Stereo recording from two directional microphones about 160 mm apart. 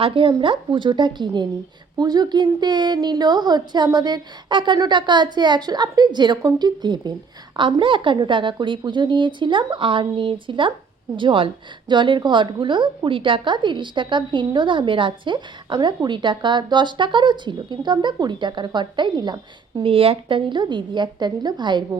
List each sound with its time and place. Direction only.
0.0 s a woman's voice: 35° right (ahead or behind)